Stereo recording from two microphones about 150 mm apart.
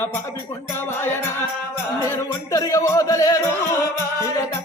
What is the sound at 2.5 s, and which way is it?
Music, 20° left (ahead or behind).